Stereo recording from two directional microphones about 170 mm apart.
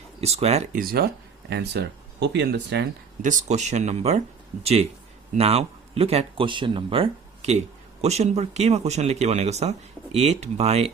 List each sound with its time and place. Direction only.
0.2 s speech: 40° right (ahead or behind)
0.8 s speech: 65° right (ahead or behind); by 2.8 s 90° right
3.2 s speech: 45° right (ahead or behind)